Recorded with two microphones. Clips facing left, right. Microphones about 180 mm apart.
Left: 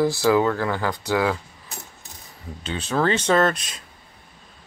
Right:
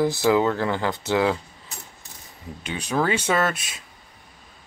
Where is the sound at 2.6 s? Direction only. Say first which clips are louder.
Left 1 dB; 10° right (ahead or behind).